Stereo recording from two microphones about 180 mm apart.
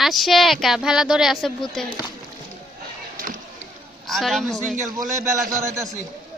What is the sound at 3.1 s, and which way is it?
Vehicle, 50° right (ahead or behind).